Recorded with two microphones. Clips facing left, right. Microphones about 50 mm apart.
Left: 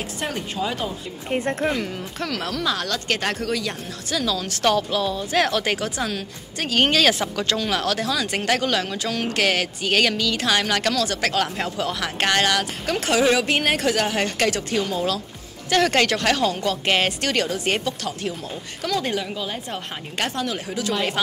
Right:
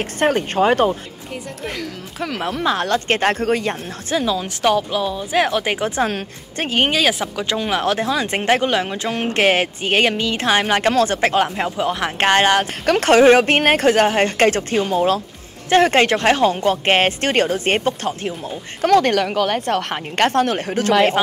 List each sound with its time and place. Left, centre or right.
0.0 s a woman's voice: right
1.3 s a woman's voice: left
2.1 s speech: centre
5.9 s speech: right
6.7 s speech: centre
12.8 s speech: right
18.8 s a woman's voice: right